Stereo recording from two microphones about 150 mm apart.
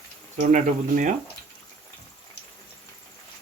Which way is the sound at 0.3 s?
55° right (ahead or behind).